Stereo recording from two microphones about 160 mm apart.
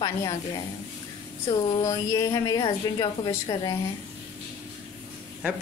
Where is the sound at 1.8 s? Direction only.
20° left (ahead or behind).